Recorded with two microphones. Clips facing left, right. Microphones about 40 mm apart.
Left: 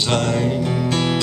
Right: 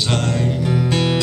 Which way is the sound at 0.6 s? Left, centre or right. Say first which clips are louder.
Right 1 dB; centre.